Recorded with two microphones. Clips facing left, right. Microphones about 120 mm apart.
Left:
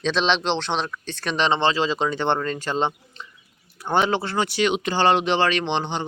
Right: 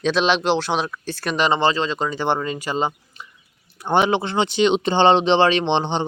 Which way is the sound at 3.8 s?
20° right (ahead or behind).